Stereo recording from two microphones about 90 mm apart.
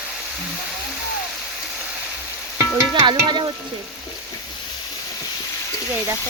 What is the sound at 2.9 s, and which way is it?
Speech, 65° right (ahead or behind).